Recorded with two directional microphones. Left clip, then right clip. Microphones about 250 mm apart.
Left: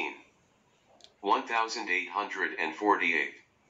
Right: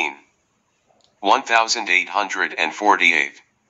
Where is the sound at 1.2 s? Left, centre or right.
Right.